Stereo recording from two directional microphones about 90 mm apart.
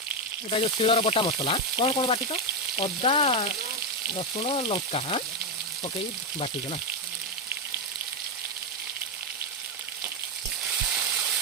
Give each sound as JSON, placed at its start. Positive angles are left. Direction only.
{"t": 0.5, "sound": "frying", "side_deg": 90}
{"t": 4.1, "sound": "frying", "side_deg": 90}